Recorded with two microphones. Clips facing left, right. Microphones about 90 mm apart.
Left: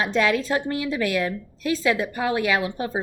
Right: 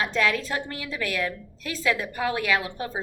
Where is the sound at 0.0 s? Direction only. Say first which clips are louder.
Left 3 dB; 25° left (ahead or behind).